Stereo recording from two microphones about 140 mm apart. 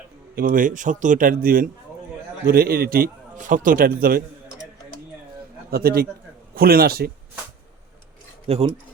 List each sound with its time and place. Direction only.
0.3 s a man's voice: 80° right
5.7 s a man's voice: 90° right
8.4 s speech: 45° right (ahead or behind)